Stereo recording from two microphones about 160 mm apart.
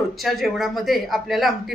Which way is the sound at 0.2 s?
Centre (ahead or behind).